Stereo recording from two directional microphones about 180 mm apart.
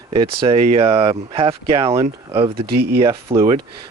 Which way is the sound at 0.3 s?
30° right (ahead or behind).